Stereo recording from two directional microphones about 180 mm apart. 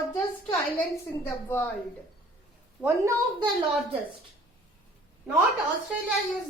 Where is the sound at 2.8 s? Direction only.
15° right (ahead or behind).